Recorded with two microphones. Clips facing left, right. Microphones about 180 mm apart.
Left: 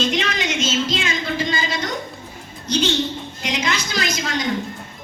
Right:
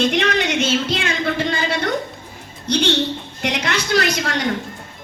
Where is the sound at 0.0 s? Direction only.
60° right (ahead or behind).